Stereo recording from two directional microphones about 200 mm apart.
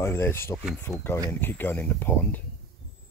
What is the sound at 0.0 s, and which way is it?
Speech, 10° left (ahead or behind).